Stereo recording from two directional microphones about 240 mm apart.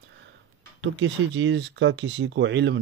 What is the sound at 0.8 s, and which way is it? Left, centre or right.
Speech, right.